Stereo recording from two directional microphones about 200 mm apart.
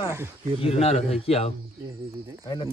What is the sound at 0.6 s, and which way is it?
Speech, 30° left (ahead or behind).